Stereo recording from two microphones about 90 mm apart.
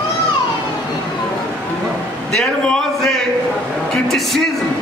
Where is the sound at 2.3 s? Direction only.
5° left (ahead or behind).